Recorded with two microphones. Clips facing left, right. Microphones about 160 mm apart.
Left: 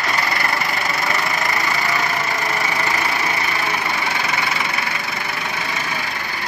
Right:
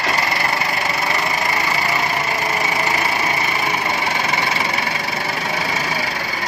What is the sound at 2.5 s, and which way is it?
Engine, 20° right (ahead or behind).